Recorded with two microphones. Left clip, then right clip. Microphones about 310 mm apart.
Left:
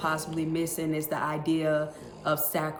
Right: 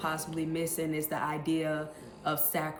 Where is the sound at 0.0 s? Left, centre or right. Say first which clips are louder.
Left 4 dB; centre.